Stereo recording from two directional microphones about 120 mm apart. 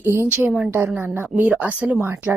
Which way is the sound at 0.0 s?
20° right (ahead or behind).